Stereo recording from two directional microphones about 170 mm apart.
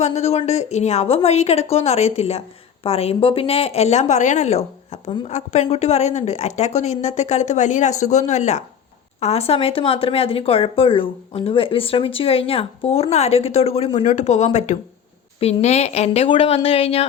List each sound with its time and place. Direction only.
0.0 s a woman's voice: 40° left (ahead or behind)